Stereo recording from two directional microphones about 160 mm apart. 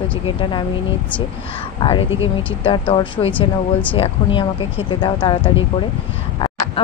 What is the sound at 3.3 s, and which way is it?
Speech, 10° left (ahead or behind).